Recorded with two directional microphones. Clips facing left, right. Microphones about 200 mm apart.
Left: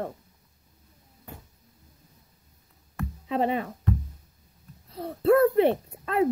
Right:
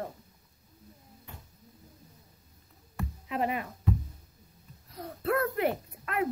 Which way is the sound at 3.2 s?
30° left (ahead or behind).